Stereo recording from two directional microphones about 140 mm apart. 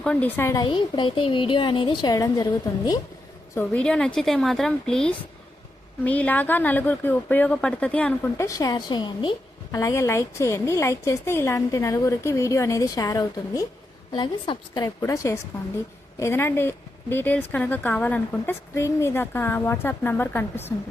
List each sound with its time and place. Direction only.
0.0 s a woman's voice: 10° left (ahead or behind)
0.6 s a woman's voice: 35° left (ahead or behind)
3.5 s a woman's voice: 15° left (ahead or behind); by 9.3 s 35° left (ahead or behind)
9.7 s a woman's voice: 20° left (ahead or behind)
14.1 s a woman's voice: 35° left (ahead or behind)
14.8 s a woman's voice: 25° left (ahead or behind)